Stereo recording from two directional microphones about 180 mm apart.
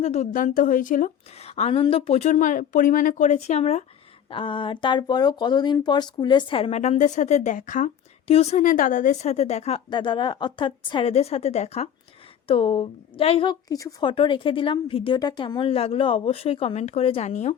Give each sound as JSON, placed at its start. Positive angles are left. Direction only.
{"t": 0.0, "sound": "a woman's voice", "side_deg": 40}